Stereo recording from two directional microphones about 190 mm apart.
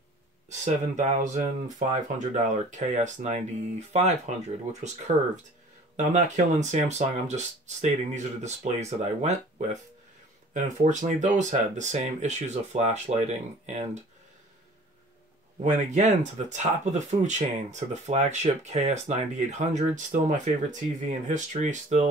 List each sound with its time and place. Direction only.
0.5 s speech: 40° right (ahead or behind)
15.6 s speech: 40° right (ahead or behind)